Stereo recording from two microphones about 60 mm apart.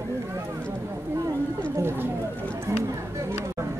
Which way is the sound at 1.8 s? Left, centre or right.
Right.